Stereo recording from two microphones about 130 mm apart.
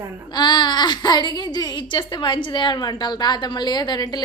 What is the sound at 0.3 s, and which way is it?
Speech, 35° left (ahead or behind).